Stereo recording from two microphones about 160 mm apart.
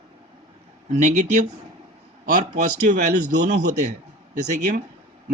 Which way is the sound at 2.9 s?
55° right (ahead or behind).